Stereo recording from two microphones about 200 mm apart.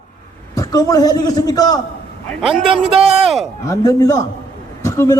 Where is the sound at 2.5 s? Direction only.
30° right (ahead or behind).